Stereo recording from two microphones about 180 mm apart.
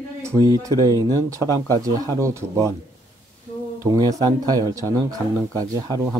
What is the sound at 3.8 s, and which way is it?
Speech, 20° right (ahead or behind).